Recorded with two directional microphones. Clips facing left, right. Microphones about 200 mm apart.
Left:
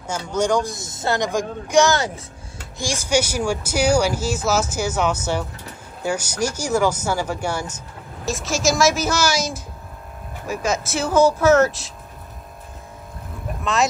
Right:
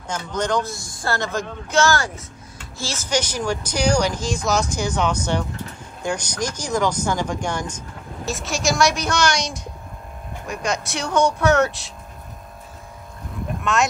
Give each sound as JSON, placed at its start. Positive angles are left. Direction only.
{"t": 0.0, "sound": "speech", "side_deg": 10}
{"t": 2.8, "sound": "speech", "side_deg": 10}
{"t": 13.7, "sound": "speech", "side_deg": 0}